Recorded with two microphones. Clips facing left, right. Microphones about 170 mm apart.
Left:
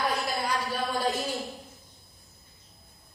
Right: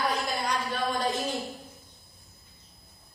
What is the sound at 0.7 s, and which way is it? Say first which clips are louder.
Speech: even; 10° left (ahead or behind).